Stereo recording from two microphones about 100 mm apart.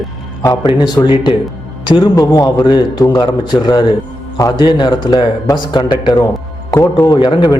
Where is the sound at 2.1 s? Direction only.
35° left (ahead or behind).